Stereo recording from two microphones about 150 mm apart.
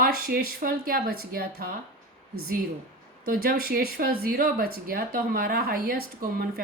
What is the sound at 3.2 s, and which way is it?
Speech, 75° right (ahead or behind).